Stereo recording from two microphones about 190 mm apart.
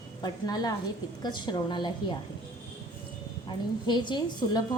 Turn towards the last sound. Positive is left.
turn(degrees=25)  # may be behind; listen again after turning